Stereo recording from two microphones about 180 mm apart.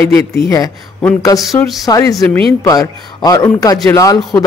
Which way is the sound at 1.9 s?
20° left (ahead or behind).